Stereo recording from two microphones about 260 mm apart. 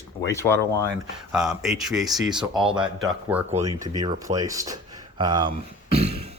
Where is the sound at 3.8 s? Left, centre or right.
Centre.